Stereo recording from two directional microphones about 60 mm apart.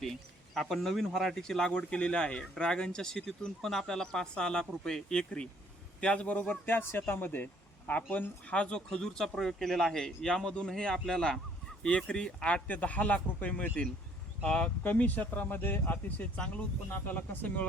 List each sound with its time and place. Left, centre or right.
0.0 s a man's voice: centre
6.5 s a man's voice: left
8.4 s speech: centre
12.6 s speech: left
14.8 s speech: left